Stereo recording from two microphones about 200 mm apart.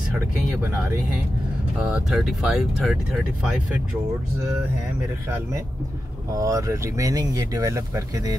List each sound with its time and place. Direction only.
1.8 s speech: 5° right (ahead or behind)
6.3 s speech: 15° right (ahead or behind)